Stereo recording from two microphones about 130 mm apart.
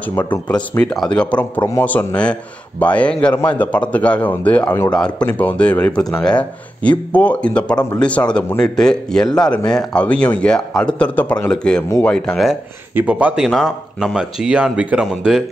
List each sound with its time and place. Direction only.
0.0 s a man's voice: 15° left (ahead or behind)
12.9 s a man's voice: 10° right (ahead or behind)